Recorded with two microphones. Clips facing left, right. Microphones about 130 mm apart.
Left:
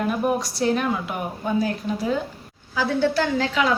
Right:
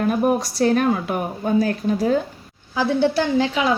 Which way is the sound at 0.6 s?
50° right (ahead or behind).